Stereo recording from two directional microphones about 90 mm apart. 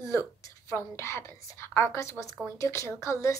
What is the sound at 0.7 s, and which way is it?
A woman's voice, 30° left (ahead or behind).